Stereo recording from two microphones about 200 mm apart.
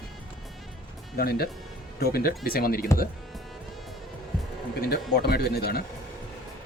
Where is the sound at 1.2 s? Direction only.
50° left (ahead or behind).